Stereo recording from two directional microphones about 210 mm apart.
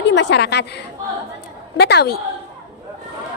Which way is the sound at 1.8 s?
50° left (ahead or behind).